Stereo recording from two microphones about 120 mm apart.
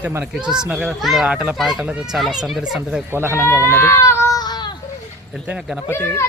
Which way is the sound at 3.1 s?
20° right (ahead or behind).